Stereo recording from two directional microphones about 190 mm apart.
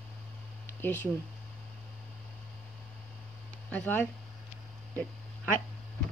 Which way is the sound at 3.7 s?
10° left (ahead or behind).